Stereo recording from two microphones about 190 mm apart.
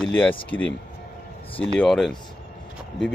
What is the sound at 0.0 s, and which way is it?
Speech, 10° left (ahead or behind).